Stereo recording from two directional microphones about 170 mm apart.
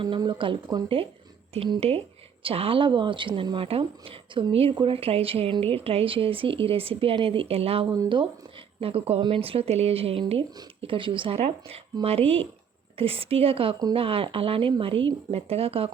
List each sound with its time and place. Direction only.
0.0 s speech: 25° right (ahead or behind)
7.9 s speech: 20° right (ahead or behind)
8.2 s speech: 35° right (ahead or behind)